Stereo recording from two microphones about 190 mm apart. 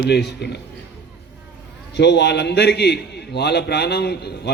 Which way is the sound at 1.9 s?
65° left (ahead or behind).